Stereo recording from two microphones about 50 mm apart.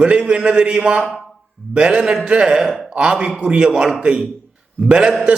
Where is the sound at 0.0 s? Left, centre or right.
Right.